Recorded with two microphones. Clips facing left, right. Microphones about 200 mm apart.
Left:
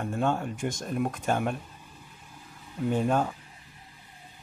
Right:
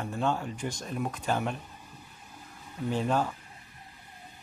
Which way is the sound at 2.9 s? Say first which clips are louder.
Left 2 dB; 50° left (ahead or behind).